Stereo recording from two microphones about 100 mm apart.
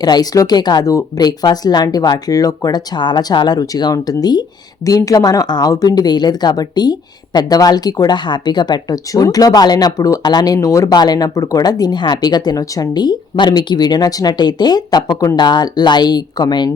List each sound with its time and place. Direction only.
0.0 s speech: 40° left (ahead or behind)